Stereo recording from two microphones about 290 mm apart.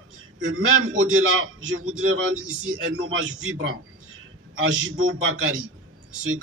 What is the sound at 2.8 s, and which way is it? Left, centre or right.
A man's voice, right.